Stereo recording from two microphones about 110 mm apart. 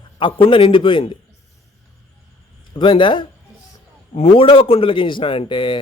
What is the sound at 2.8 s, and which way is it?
A man's voice, 50° left (ahead or behind).